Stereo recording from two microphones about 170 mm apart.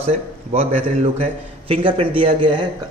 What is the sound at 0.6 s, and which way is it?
A man's voice, 40° right (ahead or behind).